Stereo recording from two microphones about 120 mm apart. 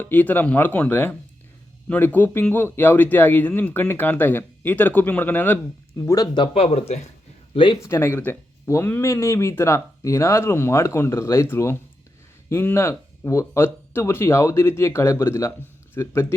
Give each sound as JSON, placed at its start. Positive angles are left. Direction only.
{"t": 0.0, "sound": "speech", "side_deg": 15}
{"t": 6.5, "sound": "speech", "side_deg": 55}
{"t": 7.5, "sound": "speech", "side_deg": 45}
{"t": 7.8, "sound": "speech", "side_deg": 20}